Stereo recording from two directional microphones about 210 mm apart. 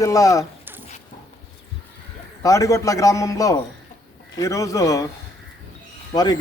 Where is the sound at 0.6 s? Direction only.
10° right (ahead or behind).